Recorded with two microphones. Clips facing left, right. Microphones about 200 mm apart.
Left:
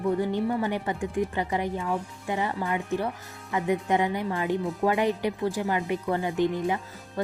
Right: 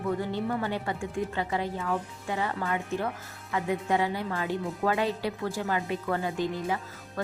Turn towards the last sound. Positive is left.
turn(degrees=15)  # may be behind; listen again after turning